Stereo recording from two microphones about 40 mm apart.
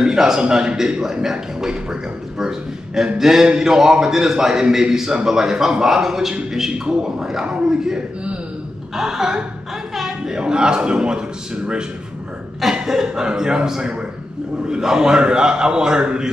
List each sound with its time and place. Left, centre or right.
0.0 s a man's voice: centre
7.4 s a man's voice: right
8.9 s a man's voice: centre
9.9 s a sound: centre
10.4 s a man's voice: right
12.8 s a man's voice: centre